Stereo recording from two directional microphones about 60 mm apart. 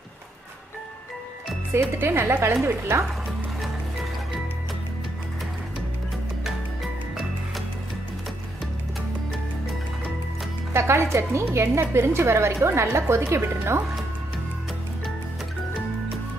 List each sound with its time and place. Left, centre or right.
1.7 s a woman's voice: right
10.7 s a woman's voice: right